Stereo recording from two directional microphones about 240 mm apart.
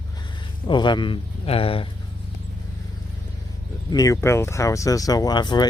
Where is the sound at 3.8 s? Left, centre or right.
Centre.